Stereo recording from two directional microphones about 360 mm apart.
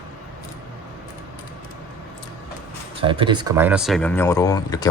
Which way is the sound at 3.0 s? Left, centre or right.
Centre.